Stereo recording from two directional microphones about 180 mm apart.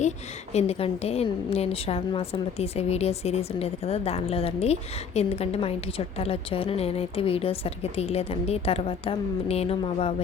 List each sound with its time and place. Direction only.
0.5 s a woman's voice: 35° left (ahead or behind)